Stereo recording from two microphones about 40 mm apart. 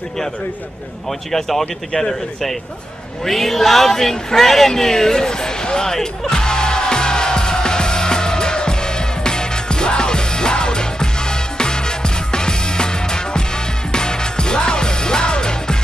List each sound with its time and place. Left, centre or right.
1.3 s speech: centre
3.3 s a sound: centre
13.9 s music: centre